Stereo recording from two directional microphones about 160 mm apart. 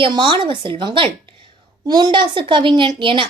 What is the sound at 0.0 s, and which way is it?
A woman's voice, 30° right (ahead or behind).